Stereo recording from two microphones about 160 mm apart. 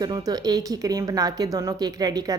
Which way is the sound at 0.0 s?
25° right (ahead or behind).